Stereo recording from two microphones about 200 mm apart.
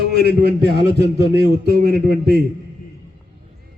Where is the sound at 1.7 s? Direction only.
50° right (ahead or behind).